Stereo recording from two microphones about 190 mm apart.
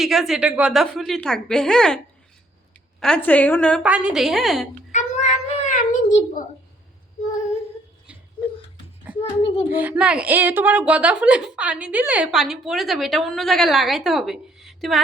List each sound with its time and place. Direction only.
0.0 s a woman's voice: centre (ahead or behind)
3.0 s a woman's voice: 5° left (ahead or behind)
3.8 s a woman's voice: 5° right (ahead or behind)
4.9 s a sound: 40° left (ahead or behind)
9.1 s a sound: 5° right (ahead or behind)
9.7 s a woman's voice: 10° right (ahead or behind)